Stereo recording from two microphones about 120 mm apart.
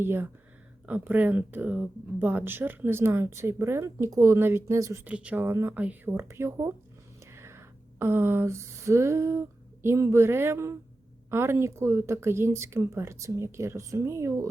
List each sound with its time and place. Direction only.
0.0 s speech: 20° right (ahead or behind)
5.0 s speech: 10° right (ahead or behind)
5.5 s speech: 20° right (ahead or behind)